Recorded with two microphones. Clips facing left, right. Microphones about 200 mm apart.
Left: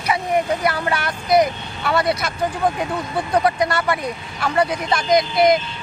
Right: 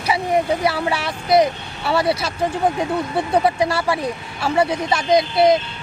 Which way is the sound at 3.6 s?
30° right (ahead or behind).